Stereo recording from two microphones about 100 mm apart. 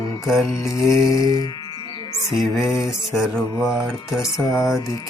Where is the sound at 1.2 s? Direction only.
40° left (ahead or behind).